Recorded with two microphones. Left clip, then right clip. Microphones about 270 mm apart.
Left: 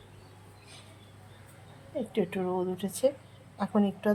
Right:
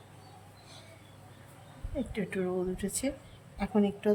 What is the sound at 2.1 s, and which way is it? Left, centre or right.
Speech, centre.